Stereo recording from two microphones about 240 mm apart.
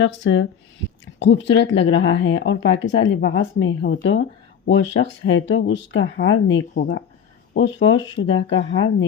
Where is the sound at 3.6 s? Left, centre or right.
Left.